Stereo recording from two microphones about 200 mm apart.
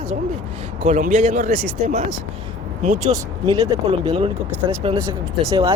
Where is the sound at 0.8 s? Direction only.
40° right (ahead or behind).